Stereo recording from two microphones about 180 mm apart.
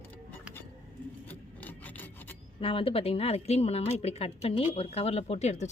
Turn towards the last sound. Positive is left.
turn(degrees=40)  # may be behind; listen again after turning